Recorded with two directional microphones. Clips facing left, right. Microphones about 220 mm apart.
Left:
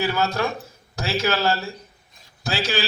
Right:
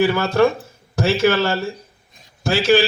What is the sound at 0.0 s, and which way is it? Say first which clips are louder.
A man's voice: right 8 dB; 50° right (ahead or behind).